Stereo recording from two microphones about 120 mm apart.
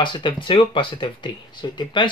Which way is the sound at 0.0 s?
40° left (ahead or behind).